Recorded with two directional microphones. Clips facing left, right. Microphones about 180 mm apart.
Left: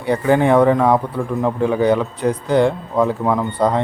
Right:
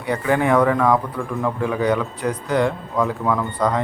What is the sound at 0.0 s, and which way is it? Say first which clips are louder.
A man's voice: left 4 dB; 30° left (ahead or behind).